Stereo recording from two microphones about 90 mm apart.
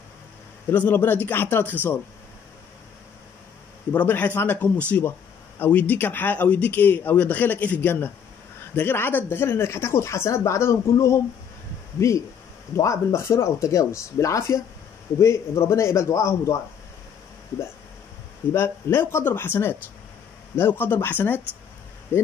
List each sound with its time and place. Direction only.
0.7 s speech: 20° left (ahead or behind)
3.9 s speech: 20° left (ahead or behind)
18.5 s speech: 25° left (ahead or behind)